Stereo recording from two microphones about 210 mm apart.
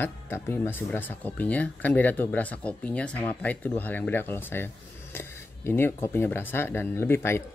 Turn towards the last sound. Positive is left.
turn(degrees=10)  # may be behind; listen again after turning